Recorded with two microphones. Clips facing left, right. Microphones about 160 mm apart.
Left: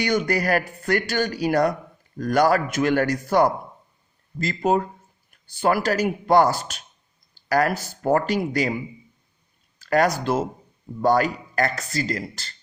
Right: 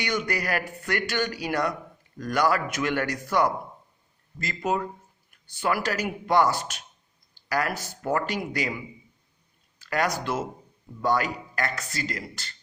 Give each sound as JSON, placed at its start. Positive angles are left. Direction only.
{"t": 0.0, "sound": "speech", "side_deg": 40}